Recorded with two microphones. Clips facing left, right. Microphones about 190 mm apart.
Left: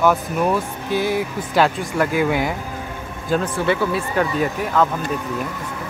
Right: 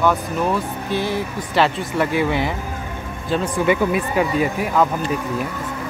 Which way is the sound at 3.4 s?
15° right (ahead or behind).